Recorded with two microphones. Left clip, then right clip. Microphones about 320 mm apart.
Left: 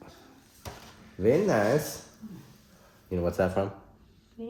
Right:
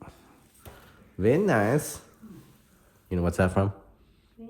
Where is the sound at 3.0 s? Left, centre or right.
Right.